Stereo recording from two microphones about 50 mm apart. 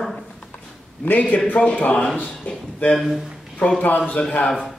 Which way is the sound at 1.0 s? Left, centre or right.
Left.